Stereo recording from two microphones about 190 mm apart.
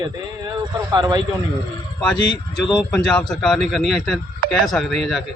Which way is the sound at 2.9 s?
5° left (ahead or behind).